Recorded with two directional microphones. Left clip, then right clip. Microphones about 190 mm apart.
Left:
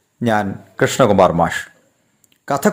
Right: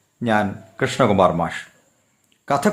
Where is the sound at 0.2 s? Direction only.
30° left (ahead or behind).